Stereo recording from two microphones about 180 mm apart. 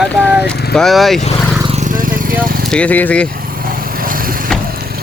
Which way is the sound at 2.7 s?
5° left (ahead or behind).